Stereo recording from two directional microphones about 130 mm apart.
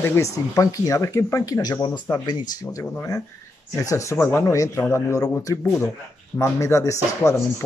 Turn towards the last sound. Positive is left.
turn(degrees=25)  # may be behind; listen again after turning